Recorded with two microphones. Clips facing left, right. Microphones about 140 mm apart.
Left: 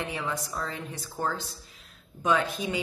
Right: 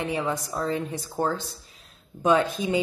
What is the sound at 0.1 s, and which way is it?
Speech, 20° right (ahead or behind).